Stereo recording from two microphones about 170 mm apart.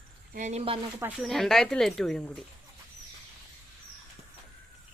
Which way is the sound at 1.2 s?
Centre (ahead or behind).